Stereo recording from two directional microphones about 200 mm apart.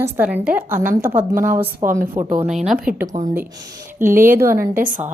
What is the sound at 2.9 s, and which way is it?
Speech, 40° right (ahead or behind).